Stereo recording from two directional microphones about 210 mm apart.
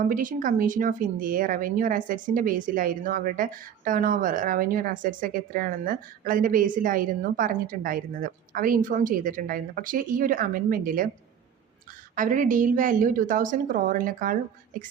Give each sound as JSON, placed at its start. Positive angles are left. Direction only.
{"t": 0.0, "sound": "speech", "side_deg": -40}
{"t": 12.1, "sound": "speech", "side_deg": -40}